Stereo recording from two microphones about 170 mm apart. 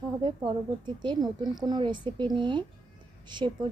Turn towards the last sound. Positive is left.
turn(degrees=-25)  # may be behind; listen again after turning